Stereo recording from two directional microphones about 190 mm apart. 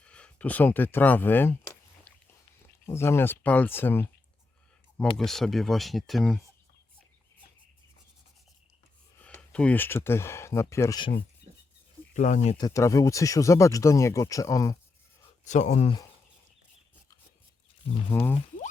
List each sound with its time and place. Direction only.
0.0 s speech: 5° left (ahead or behind)
2.1 s a sound: 10° left (ahead or behind)
2.8 s speech: 15° left (ahead or behind)
5.1 s speech: centre (ahead or behind)
9.1 s speech: 5° left (ahead or behind)
12.1 s speech: 40° left (ahead or behind)
12.5 s speech: 15° left (ahead or behind)
15.4 s speech: 40° left (ahead or behind)
18.1 s speech: 10° left (ahead or behind)